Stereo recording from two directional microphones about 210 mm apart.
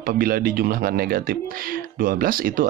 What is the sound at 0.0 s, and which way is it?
Speech, 45° right (ahead or behind).